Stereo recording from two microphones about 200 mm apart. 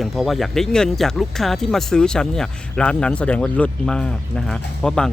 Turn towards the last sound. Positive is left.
turn(degrees=5)  # may be behind; listen again after turning